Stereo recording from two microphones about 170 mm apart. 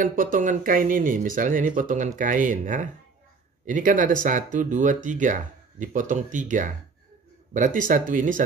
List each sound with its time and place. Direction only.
0.0 s speech: 55° right (ahead or behind)